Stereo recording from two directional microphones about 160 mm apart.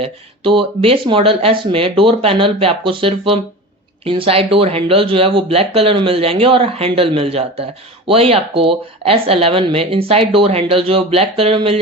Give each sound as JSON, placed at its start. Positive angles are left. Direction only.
{"t": 0.0, "sound": "speech", "side_deg": -35}